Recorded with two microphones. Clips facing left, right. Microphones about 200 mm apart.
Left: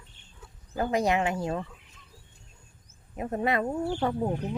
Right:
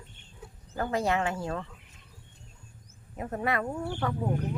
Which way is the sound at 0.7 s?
15° left (ahead or behind).